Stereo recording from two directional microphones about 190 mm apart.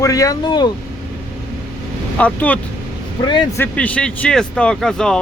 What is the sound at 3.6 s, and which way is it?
Speech, 5° left (ahead or behind).